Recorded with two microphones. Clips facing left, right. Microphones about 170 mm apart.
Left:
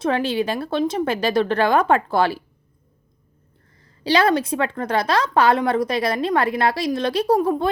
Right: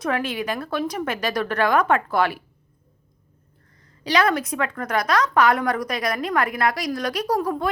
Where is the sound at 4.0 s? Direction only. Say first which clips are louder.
Left 3 dB; 30° left (ahead or behind).